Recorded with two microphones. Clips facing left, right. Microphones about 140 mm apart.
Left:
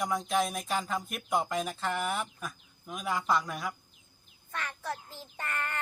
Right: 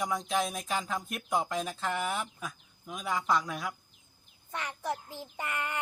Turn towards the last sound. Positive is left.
turn(degrees=-15)  # may be behind; listen again after turning